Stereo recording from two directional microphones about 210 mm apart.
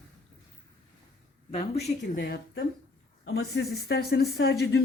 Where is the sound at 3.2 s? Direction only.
75° left (ahead or behind).